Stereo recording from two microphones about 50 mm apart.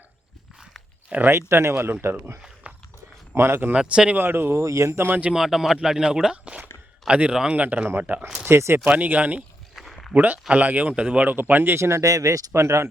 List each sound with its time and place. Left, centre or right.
1.3 s speech: right
2.6 s walk: right
3.3 s speech: right
3.8 s speech: centre
4.2 s speech: right
4.6 s speech: right
5.3 s speech: centre; by 8.2 s right
8.4 s speech: right
8.8 s speech: right
9.9 s a sound: centre
10.2 s speech: right
11.3 s speech: right
11.8 s speech: right